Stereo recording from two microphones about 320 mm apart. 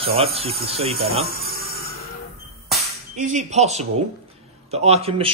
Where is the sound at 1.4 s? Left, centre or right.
Right.